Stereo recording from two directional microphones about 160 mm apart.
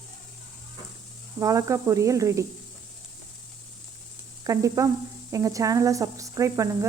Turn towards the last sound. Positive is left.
turn(degrees=-20)  # may be behind; listen again after turning